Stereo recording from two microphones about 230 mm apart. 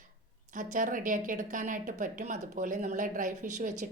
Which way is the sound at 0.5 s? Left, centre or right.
Right.